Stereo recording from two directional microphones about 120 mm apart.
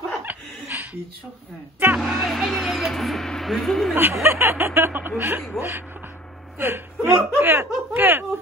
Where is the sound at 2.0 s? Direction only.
Centre (ahead or behind).